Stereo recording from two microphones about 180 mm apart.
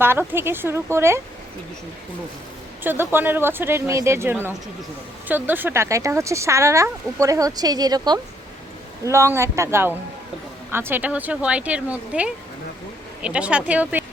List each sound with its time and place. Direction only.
0.0 s speech: 10° right (ahead or behind)
2.8 s speech: 10° right (ahead or behind)